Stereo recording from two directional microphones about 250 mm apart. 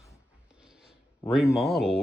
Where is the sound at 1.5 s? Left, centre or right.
Left.